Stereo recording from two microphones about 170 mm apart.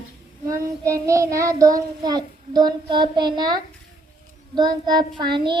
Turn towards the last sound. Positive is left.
turn(degrees=-25)  # may be behind; listen again after turning